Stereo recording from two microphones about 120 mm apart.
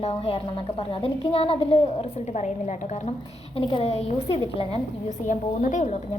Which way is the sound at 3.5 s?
50° left (ahead or behind).